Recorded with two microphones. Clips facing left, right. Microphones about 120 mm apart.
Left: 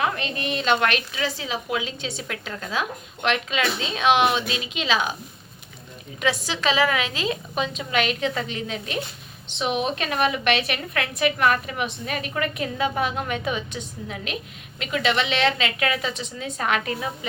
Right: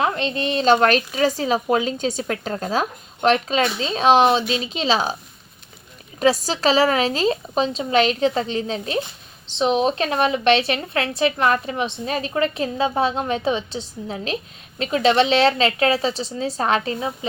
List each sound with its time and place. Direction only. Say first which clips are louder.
0.0 s a woman's voice: right 4 dB; 30° right (ahead or behind)
6.1 s a woman's voice: right 7 dB; 40° right (ahead or behind)